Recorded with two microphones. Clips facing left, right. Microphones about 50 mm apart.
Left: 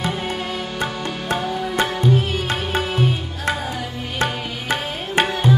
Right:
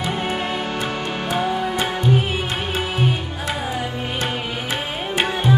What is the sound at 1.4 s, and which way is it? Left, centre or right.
Music, right.